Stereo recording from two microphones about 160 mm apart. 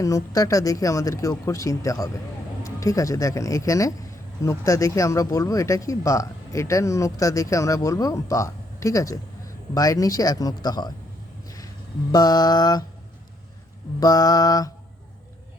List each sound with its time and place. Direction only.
0.0 s speech: 20° left (ahead or behind)
11.4 s a sound: 20° left (ahead or behind)
12.1 s speech: 25° left (ahead or behind)
14.0 s speech: 25° left (ahead or behind)